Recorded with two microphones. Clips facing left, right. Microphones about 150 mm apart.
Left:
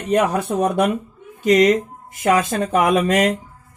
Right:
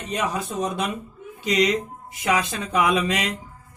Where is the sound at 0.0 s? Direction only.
55° left (ahead or behind).